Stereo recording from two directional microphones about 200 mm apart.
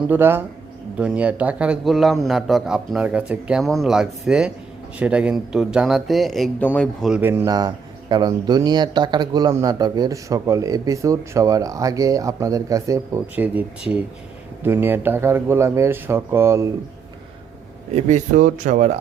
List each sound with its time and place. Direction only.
0.1 s a man's voice: 10° right (ahead or behind)
17.9 s speech: 35° right (ahead or behind)